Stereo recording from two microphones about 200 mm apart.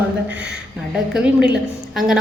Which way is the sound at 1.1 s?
5° right (ahead or behind).